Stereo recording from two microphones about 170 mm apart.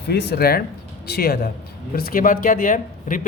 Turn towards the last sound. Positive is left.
turn(degrees=50)  # may be behind; listen again after turning